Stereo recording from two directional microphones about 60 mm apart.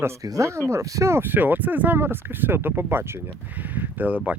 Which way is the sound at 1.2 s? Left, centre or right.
Right.